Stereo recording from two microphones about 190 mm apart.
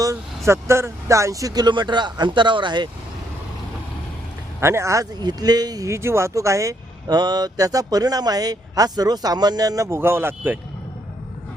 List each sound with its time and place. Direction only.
0.0 s speech: 15° right (ahead or behind)
4.6 s speech: 15° right (ahead or behind)